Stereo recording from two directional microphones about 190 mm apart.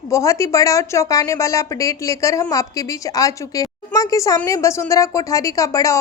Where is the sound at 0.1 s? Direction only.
15° left (ahead or behind).